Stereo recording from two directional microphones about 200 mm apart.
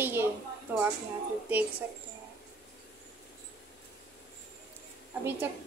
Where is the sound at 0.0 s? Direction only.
10° right (ahead or behind).